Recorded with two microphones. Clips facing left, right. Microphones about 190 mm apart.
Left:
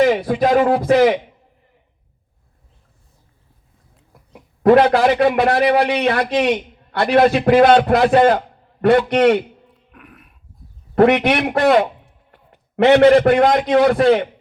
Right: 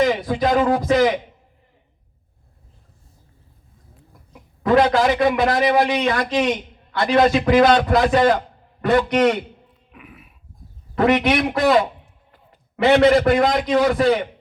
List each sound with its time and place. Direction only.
0.0 s a man's voice: 60° left (ahead or behind)
4.3 s a man's voice: 60° left (ahead or behind)
9.9 s a sound: 5° right (ahead or behind)
10.9 s a man's voice: 60° left (ahead or behind)